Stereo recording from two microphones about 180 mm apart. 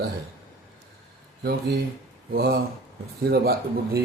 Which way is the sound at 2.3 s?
60° right (ahead or behind).